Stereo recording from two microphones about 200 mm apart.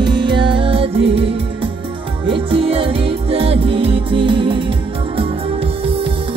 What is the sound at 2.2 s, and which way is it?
Music, 25° right (ahead or behind).